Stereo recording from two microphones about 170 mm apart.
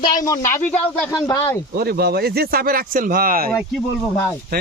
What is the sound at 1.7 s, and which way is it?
Speech, 65° right (ahead or behind).